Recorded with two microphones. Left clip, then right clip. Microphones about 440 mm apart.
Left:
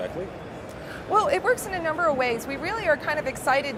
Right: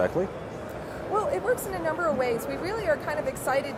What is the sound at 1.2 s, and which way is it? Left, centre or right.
A woman's voice, left.